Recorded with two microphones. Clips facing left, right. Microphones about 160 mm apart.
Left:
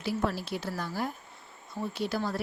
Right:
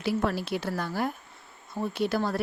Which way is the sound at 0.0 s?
70° right (ahead or behind).